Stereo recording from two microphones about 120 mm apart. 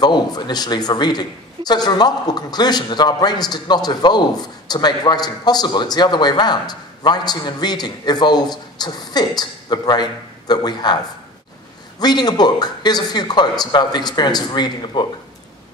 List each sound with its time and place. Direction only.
0.0 s speech: 35° left (ahead or behind)
12.0 s speech: 35° left (ahead or behind)